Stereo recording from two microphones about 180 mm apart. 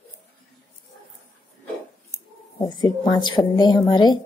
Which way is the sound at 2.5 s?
25° left (ahead or behind).